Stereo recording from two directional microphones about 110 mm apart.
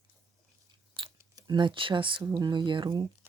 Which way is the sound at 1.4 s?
45° right (ahead or behind).